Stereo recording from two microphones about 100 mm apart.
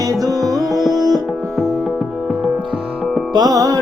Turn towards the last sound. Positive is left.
turn(degrees=-40)  # may be behind; listen again after turning